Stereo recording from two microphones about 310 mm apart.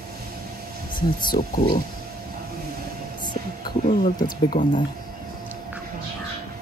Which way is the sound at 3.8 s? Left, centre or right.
Left.